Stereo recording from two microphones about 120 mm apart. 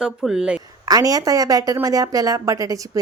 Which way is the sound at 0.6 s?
30° right (ahead or behind).